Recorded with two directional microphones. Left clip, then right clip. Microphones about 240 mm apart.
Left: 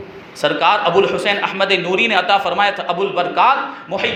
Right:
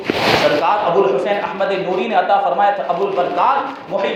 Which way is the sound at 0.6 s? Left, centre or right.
Left.